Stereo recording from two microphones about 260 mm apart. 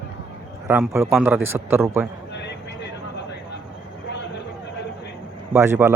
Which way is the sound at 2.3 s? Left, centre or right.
Left.